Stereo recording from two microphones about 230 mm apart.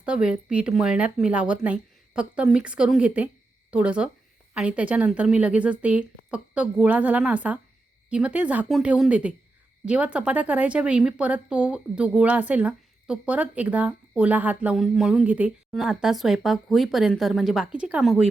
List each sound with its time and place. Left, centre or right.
0.0 s a woman's voice: centre